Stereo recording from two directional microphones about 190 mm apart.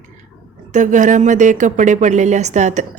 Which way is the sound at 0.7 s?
40° right (ahead or behind).